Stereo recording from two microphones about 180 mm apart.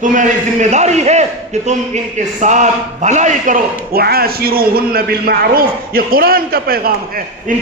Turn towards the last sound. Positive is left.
turn(degrees=-55)  # may be behind; listen again after turning